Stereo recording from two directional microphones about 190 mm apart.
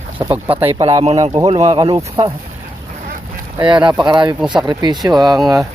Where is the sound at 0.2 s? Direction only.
20° right (ahead or behind).